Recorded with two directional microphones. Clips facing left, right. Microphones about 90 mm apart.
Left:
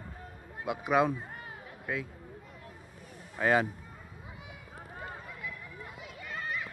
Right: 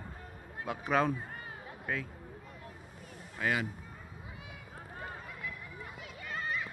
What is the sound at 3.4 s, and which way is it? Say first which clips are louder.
Speech: left 6 dB; 40° left (ahead or behind).